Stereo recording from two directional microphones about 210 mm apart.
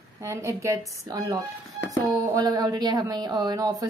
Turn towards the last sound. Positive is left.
turn(degrees=-15)  # may be behind; listen again after turning